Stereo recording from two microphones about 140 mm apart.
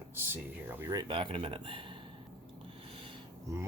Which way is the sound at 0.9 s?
35° right (ahead or behind).